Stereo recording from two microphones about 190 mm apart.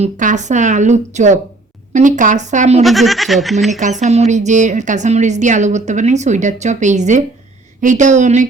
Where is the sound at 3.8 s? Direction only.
40° right (ahead or behind).